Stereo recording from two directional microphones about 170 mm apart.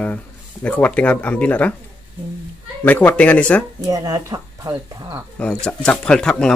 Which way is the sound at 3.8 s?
20° right (ahead or behind).